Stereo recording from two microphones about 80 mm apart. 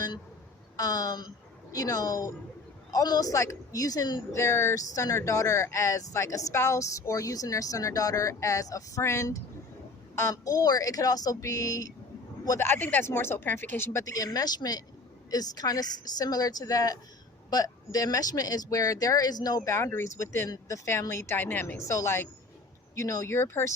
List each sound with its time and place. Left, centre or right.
0.8 s speech: left
4.4 s speech: left
12.5 s speech: left
14.0 s speech: left
20.1 s speech: left
21.3 s speech: left
21.8 s speech: left